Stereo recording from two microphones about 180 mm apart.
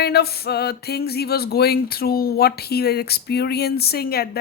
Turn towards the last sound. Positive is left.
turn(degrees=60)  # may be behind; listen again after turning